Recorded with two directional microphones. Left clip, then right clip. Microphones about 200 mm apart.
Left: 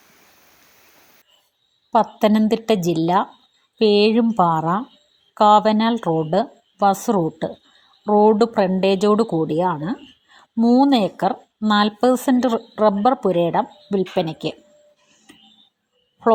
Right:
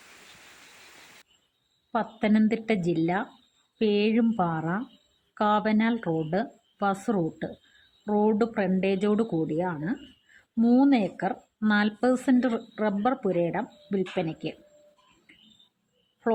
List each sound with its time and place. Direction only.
1.9 s speech: 30° left (ahead or behind)